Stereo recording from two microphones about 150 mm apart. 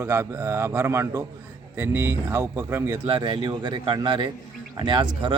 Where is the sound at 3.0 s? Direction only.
30° right (ahead or behind).